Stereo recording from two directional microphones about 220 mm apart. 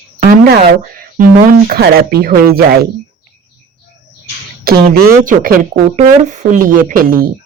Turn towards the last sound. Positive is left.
turn(degrees=-40)  # may be behind; listen again after turning